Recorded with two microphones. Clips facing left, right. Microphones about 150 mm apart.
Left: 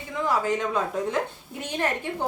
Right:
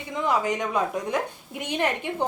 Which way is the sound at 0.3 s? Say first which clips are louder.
Even; 15° right (ahead or behind).